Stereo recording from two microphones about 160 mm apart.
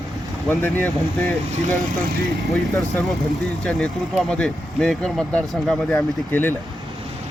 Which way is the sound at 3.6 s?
5° left (ahead or behind).